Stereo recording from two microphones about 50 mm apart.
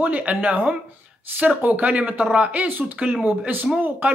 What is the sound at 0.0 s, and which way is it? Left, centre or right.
Speech, right.